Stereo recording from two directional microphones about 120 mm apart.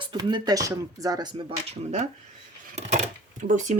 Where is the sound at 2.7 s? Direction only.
75° right (ahead or behind).